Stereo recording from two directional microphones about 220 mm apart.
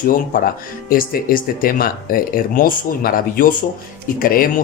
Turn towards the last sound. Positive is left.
turn(degrees=40)  # may be behind; listen again after turning